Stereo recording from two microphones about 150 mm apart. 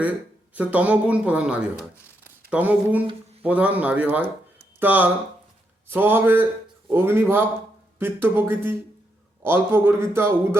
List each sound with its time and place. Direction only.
0.5 s speech: 10° right (ahead or behind)